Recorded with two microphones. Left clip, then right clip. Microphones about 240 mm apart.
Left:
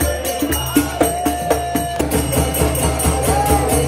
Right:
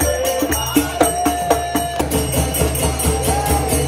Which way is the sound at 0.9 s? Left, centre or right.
Centre.